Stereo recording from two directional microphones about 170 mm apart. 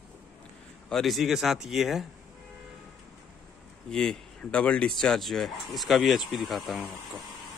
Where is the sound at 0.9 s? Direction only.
Centre (ahead or behind).